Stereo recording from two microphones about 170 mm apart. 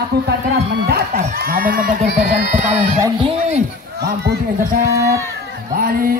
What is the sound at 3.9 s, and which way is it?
Speech, 70° right (ahead or behind).